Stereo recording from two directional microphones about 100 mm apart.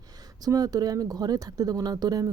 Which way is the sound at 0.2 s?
40° right (ahead or behind).